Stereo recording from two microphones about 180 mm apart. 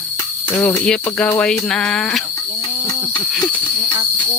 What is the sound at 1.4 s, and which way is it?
Speech, 5° left (ahead or behind).